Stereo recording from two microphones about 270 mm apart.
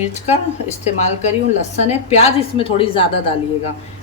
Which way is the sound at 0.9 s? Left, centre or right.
Left.